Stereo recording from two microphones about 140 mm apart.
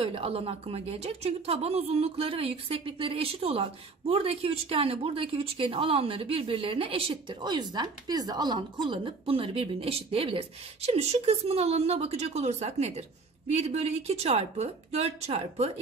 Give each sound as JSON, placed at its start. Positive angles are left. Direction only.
{"t": 0.0, "sound": "speech", "side_deg": -45}